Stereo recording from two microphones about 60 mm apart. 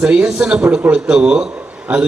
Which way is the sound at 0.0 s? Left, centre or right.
Centre.